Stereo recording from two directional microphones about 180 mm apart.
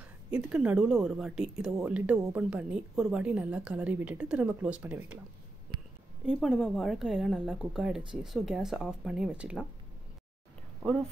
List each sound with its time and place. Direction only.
0.3 s speech: 5° right (ahead or behind)
5.7 s a sound: 25° right (ahead or behind)
6.2 s speech: centre (ahead or behind)